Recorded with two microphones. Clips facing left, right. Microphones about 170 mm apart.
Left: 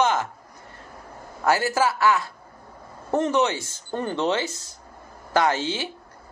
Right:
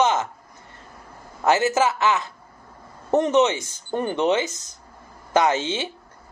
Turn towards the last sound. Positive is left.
turn(degrees=-20)  # may be behind; listen again after turning